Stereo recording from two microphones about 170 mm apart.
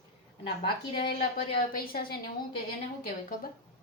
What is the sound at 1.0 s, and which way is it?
A woman's voice, 60° left (ahead or behind).